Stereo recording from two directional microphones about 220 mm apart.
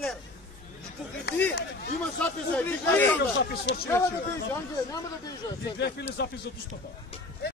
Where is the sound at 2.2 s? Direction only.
5° left (ahead or behind).